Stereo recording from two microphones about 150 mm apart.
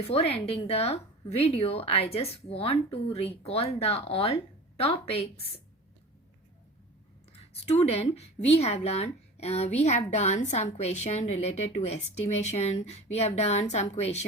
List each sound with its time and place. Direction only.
0.1 s a woman's voice: 40° left (ahead or behind)
7.3 s a sound: 45° left (ahead or behind)
8.1 s a woman's voice: 45° left (ahead or behind)